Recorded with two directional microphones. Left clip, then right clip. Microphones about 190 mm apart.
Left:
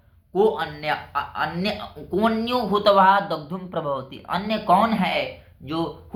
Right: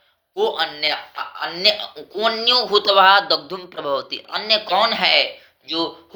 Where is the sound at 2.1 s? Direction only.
45° right (ahead or behind).